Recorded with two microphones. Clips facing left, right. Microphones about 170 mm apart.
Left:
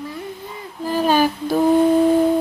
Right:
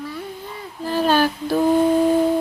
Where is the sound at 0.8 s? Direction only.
10° left (ahead or behind).